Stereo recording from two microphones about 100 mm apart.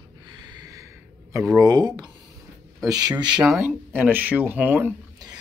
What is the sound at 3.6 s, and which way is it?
Speech, 20° right (ahead or behind).